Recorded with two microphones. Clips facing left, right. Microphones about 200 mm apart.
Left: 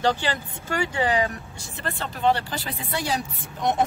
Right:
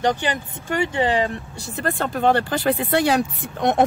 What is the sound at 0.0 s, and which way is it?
Speech, 15° right (ahead or behind).